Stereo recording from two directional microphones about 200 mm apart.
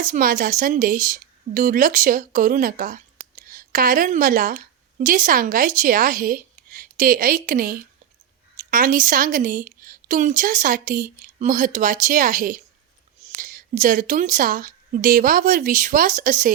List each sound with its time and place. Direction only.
0.0 s a woman's voice: 45° right (ahead or behind)